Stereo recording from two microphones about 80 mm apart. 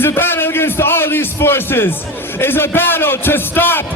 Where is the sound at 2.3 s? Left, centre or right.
Left.